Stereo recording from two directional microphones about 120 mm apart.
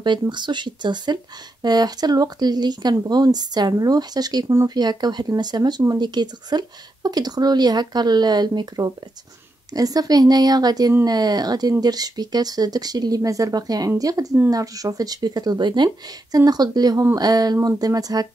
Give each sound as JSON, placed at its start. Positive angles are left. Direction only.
{"t": 0.0, "sound": "speech", "side_deg": -40}